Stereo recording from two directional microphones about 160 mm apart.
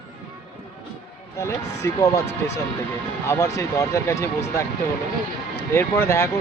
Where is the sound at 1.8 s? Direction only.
20° left (ahead or behind).